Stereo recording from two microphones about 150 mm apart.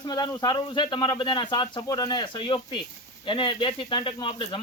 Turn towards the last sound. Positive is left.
turn(degrees=35)  # may be behind; listen again after turning